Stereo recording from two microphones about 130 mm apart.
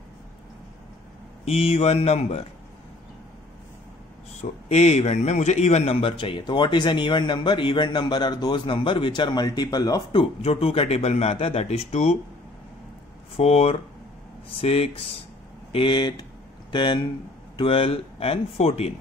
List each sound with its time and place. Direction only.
1.4 s speech: 50° left (ahead or behind)
4.4 s speech: 55° left (ahead or behind); by 10.0 s 30° left (ahead or behind)
10.1 s speech: 50° left (ahead or behind)
13.4 s speech: 50° left (ahead or behind)
15.7 s speech: 40° left (ahead or behind)